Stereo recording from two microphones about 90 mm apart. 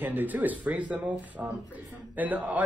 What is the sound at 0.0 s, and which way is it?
A man's voice, 20° right (ahead or behind).